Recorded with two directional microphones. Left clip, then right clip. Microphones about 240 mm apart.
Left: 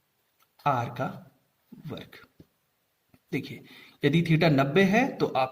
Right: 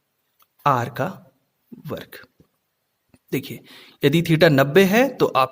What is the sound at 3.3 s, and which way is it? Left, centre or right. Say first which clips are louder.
A man's voice: right 7 dB; right.